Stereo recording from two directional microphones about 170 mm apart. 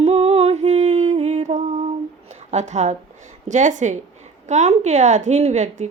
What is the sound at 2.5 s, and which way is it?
A woman's voice, 45° right (ahead or behind).